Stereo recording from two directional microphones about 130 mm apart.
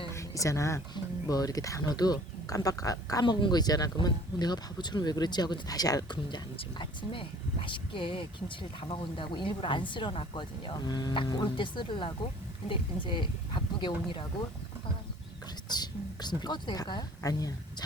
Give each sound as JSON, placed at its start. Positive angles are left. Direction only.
{"t": 0.1, "sound": "a sound", "side_deg": 25}
{"t": 0.9, "sound": "speech", "side_deg": 30}
{"t": 15.7, "sound": "whispering", "side_deg": 30}
{"t": 16.4, "sound": "speech", "side_deg": 35}